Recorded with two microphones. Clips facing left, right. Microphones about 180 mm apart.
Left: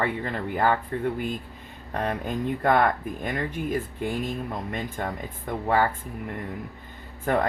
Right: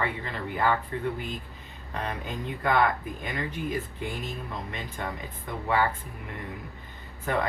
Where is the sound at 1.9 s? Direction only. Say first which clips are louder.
Left 6 dB; 50° left (ahead or behind).